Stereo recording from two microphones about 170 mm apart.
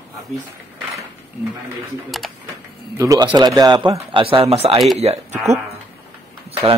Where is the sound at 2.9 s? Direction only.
20° right (ahead or behind); by 5.3 s 40° right (ahead or behind).